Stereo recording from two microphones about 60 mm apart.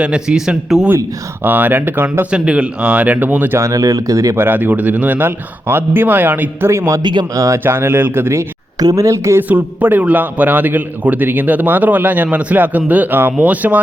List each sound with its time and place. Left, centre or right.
0.0 s a man's voice: centre
1.5 s a man's voice: right
2.3 s a man's voice: centre
3.6 s speech: right
4.4 s a man's voice: right
6.7 s speech: right
7.6 s a man's voice: right
8.8 s speech: right
9.4 s a man's voice: right